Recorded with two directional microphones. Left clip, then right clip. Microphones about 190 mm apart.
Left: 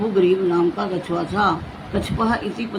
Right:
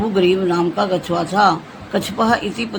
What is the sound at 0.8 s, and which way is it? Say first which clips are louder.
A man's voice: right 5 dB; 65° right (ahead or behind).